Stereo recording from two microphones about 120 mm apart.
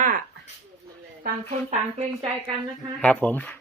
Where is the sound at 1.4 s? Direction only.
60° right (ahead or behind).